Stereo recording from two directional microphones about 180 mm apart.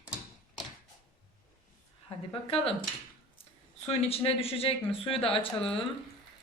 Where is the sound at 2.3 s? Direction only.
30° left (ahead or behind).